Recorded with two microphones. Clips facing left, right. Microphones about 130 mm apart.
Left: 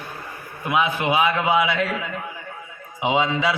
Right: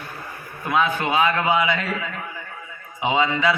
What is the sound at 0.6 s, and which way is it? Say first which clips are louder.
A man's voice: even; 10° left (ahead or behind).